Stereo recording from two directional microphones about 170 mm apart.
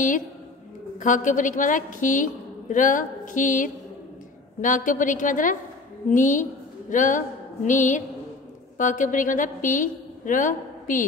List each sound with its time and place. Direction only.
0.9 s a woman's voice: 50° left (ahead or behind)
6.9 s a sound: 50° left (ahead or behind)
8.7 s a woman's voice: 50° left (ahead or behind)